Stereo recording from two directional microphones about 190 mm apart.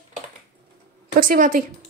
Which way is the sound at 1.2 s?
45° right (ahead or behind).